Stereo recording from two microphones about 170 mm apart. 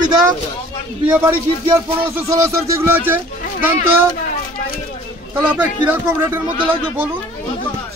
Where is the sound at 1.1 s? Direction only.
10° right (ahead or behind).